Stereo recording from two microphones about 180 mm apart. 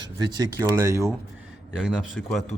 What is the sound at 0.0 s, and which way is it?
Speech, 20° right (ahead or behind).